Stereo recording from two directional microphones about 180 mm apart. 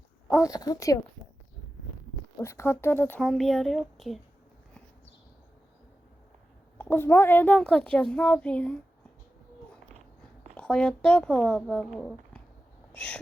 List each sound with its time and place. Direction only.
0.5 s speech: 20° left (ahead or behind)
2.4 s a woman's voice: 15° left (ahead or behind)
3.2 s speech: centre (ahead or behind)
6.7 s a woman's voice: 10° left (ahead or behind)
10.6 s speech: 5° left (ahead or behind)